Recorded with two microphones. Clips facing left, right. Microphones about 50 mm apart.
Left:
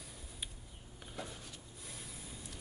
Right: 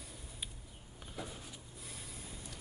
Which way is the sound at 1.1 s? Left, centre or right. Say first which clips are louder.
Even; centre.